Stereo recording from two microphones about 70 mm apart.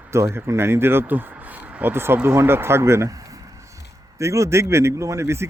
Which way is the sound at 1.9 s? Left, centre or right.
Right.